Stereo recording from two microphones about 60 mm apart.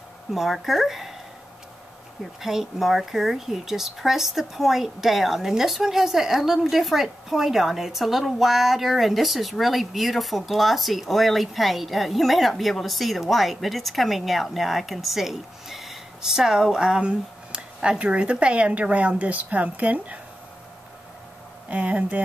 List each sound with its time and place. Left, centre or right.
0.3 s speech: centre
2.4 s speech: centre; by 20.2 s right
21.6 s speech: right